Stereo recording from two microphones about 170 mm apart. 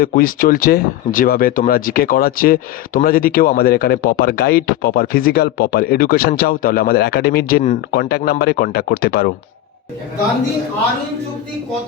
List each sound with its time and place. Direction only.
0.0 s speech: 60° left (ahead or behind)